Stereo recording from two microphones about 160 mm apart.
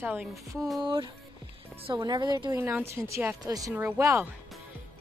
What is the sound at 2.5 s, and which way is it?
A woman's voice, 15° right (ahead or behind).